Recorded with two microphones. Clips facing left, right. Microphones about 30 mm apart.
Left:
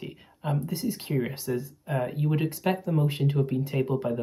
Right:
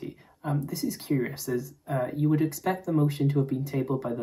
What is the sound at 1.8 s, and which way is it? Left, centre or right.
Speech, left.